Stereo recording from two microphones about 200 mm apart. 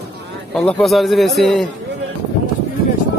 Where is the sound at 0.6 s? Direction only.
Centre (ahead or behind).